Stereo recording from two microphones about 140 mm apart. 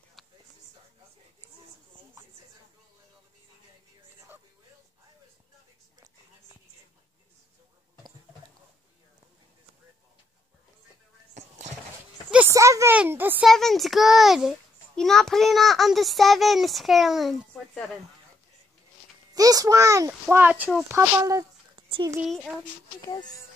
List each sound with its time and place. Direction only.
0.2 s a sound: centre (ahead or behind)
11.3 s a sound: 55° right (ahead or behind)
12.5 s a sound: 20° right (ahead or behind)
12.9 s a child's voice: 10° right (ahead or behind)
13.5 s a child's voice: centre (ahead or behind)
19.3 s a child's voice: 25° right (ahead or behind)
20.9 s speech: 25° right (ahead or behind)
22.2 s a child's voice: 5° right (ahead or behind)
23.0 s speech: 30° left (ahead or behind)